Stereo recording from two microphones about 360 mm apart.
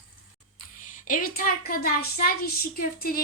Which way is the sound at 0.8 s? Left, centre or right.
Left.